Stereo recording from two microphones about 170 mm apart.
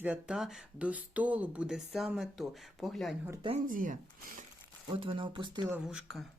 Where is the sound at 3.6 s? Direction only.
50° right (ahead or behind).